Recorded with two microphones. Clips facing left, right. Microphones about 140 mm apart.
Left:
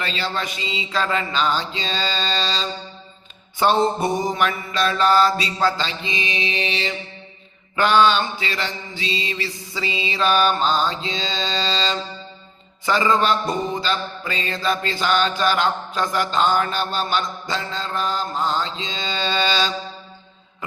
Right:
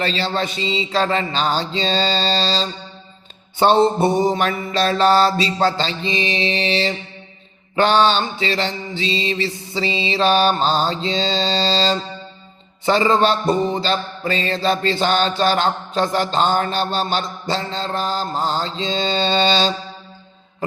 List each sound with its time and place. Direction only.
0.0 s mantra: 30° right (ahead or behind)